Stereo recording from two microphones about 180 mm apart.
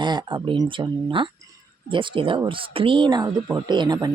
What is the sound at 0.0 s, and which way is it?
Speech, 25° right (ahead or behind).